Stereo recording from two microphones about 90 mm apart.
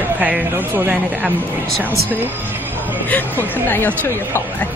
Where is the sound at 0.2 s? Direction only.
20° right (ahead or behind).